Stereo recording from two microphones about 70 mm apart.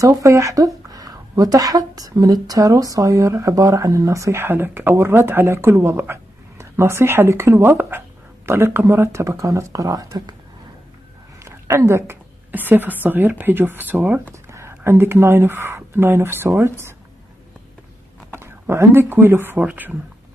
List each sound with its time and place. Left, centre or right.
0.0 s a woman's voice: right
9.2 s a woman's voice: right
11.4 s a woman's voice: right
12.4 s a woman's voice: right
14.5 s a sound: right
14.8 s speech: right
18.4 s speech: right
19.6 s speech: centre